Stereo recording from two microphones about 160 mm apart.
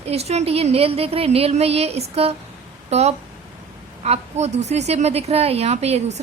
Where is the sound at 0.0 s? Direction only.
40° right (ahead or behind).